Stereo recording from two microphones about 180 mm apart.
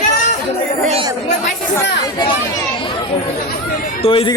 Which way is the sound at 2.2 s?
25° left (ahead or behind).